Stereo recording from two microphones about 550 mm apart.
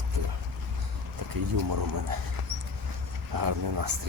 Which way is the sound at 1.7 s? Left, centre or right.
Right.